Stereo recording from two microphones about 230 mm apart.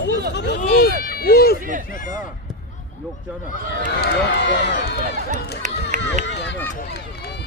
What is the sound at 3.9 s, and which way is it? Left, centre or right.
Speech, left.